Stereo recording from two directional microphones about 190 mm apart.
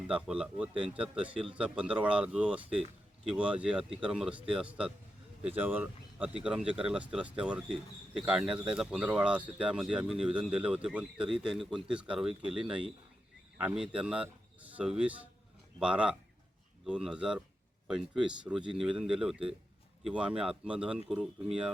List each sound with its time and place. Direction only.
0.1 s speech: 5° right (ahead or behind)
12.3 s speech: 30° right (ahead or behind)
12.6 s speech: 5° right (ahead or behind)